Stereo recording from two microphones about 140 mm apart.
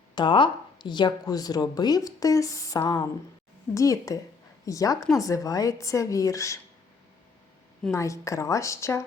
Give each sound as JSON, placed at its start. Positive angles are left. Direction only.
{"t": 0.2, "sound": "a woman's voice", "side_deg": 35}
{"t": 7.9, "sound": "a woman's voice", "side_deg": 20}